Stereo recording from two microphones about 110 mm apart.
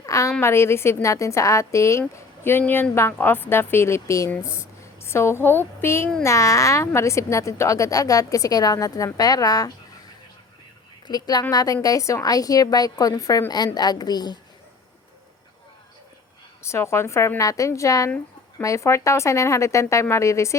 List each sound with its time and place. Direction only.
0.0 s a sound: 30° left (ahead or behind)
0.4 s a woman's voice: 25° left (ahead or behind)
11.1 s a woman's voice: 40° left (ahead or behind)
16.6 s speech: 25° left (ahead or behind)